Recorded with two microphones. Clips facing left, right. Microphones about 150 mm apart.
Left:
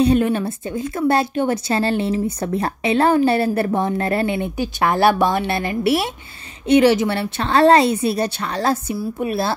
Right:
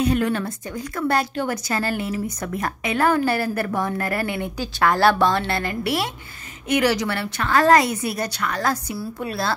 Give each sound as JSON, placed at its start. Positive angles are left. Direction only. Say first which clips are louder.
{"t": 0.0, "sound": "speech", "louder": "left 5 dB", "side_deg": 25}